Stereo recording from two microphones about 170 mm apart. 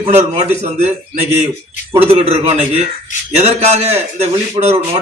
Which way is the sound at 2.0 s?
35° right (ahead or behind).